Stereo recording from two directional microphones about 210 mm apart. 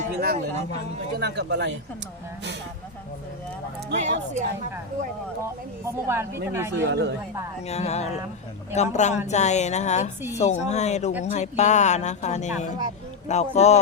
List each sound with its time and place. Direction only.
0.0 s speech: 40° right (ahead or behind)
1.2 s speech: 55° right (ahead or behind)
3.9 s speech: 35° right (ahead or behind)
5.8 s speech: 10° right (ahead or behind)
6.7 s speech: 55° right (ahead or behind)
7.7 s speech: 30° left (ahead or behind)